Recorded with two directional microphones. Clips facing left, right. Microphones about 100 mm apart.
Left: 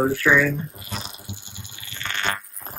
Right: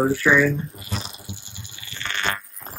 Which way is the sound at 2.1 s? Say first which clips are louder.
Even; 15° left (ahead or behind).